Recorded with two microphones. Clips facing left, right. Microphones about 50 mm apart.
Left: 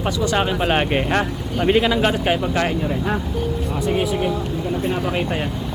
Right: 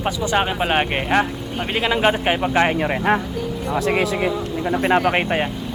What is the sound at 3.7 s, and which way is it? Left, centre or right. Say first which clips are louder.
Speech: right 2 dB; right.